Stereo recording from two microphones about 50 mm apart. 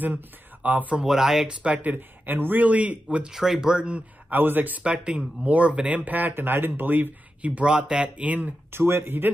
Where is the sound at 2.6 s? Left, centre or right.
Right.